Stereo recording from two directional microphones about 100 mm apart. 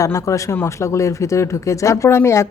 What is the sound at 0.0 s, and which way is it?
Speech, 30° left (ahead or behind).